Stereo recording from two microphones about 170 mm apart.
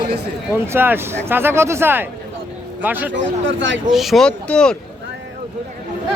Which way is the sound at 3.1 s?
90° right.